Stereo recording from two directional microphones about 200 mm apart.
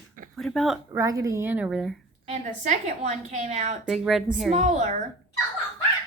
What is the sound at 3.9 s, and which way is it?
Speech, centre (ahead or behind).